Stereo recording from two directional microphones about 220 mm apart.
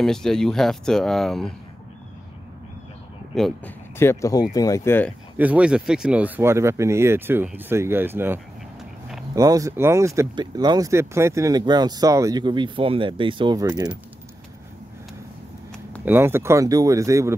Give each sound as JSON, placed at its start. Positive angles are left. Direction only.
{"t": 0.0, "sound": "speech", "side_deg": 0}
{"t": 3.3, "sound": "speech", "side_deg": 5}
{"t": 5.4, "sound": "speech", "side_deg": -5}
{"t": 9.3, "sound": "speech", "side_deg": -15}
{"t": 16.1, "sound": "speech", "side_deg": -10}